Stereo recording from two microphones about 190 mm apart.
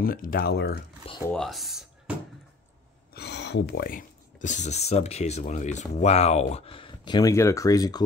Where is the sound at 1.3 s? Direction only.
Centre (ahead or behind).